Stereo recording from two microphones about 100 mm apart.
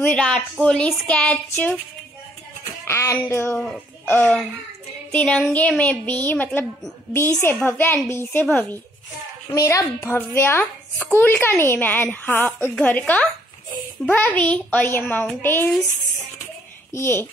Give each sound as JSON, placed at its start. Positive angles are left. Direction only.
{"t": 0.0, "sound": "a woman's voice", "side_deg": 10}
{"t": 2.8, "sound": "a woman's voice", "side_deg": 30}
{"t": 3.5, "sound": "speech", "side_deg": 5}
{"t": 4.1, "sound": "a woman's voice", "side_deg": 20}
{"t": 7.6, "sound": "a woman's voice", "side_deg": 20}
{"t": 9.5, "sound": "a woman's voice", "side_deg": 30}
{"t": 16.9, "sound": "a woman's voice", "side_deg": 25}